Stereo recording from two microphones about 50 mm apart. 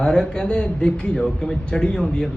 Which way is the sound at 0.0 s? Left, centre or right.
Centre.